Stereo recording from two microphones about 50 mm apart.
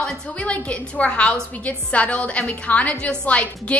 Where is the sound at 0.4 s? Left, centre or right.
Left.